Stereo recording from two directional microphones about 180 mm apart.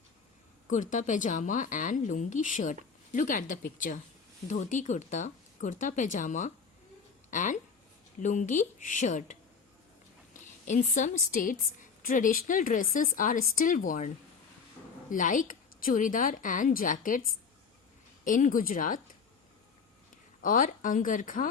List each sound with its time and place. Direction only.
0.7 s a woman's voice: 45° left (ahead or behind)
10.7 s a woman's voice: 45° left (ahead or behind)
15.1 s a woman's voice: 45° left (ahead or behind)
18.3 s a woman's voice: 45° left (ahead or behind)
20.4 s a woman's voice: 45° left (ahead or behind)